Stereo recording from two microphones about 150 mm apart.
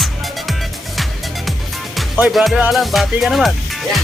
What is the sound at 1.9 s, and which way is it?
Speech, centre (ahead or behind).